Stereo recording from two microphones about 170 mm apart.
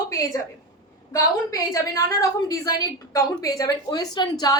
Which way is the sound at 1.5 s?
20° left (ahead or behind).